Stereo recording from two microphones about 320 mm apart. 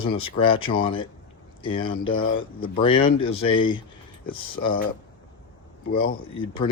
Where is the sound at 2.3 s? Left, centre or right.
Left.